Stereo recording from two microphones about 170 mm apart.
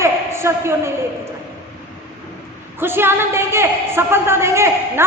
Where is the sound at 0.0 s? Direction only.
15° right (ahead or behind).